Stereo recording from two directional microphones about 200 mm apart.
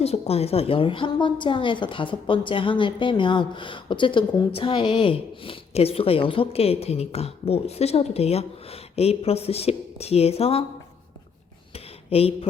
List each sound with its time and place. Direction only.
0.0 s a woman's voice: 30° left (ahead or behind)
12.1 s a woman's voice: 30° left (ahead or behind)